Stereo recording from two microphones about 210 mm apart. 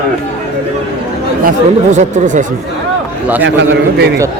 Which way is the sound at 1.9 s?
35° right (ahead or behind).